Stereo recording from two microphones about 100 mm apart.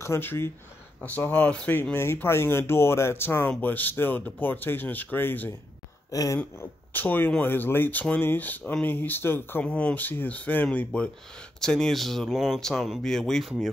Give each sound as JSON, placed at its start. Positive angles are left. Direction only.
{"t": 0.0, "sound": "speech", "side_deg": 25}
{"t": 6.1, "sound": "a sound", "side_deg": 35}
{"t": 6.6, "sound": "speech", "side_deg": 20}
{"t": 9.7, "sound": "speech", "side_deg": 10}